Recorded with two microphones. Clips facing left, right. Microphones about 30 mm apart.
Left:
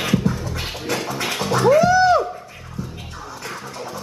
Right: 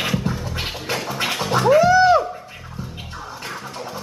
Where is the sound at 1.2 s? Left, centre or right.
Centre.